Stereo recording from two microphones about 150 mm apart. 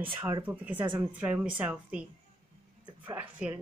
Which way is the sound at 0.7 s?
30° right (ahead or behind).